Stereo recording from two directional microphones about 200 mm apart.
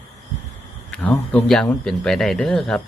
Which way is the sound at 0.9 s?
5° left (ahead or behind).